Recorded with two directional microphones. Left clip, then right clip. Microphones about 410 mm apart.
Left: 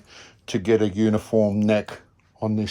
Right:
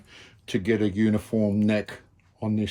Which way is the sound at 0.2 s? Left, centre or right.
Centre.